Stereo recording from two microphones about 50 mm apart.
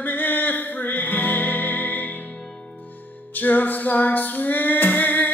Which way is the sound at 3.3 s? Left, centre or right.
Left.